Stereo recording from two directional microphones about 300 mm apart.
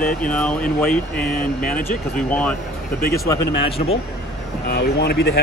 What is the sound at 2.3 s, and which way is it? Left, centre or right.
Speech, centre.